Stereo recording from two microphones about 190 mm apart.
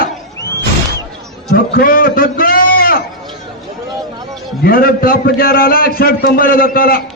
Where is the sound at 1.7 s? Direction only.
50° left (ahead or behind).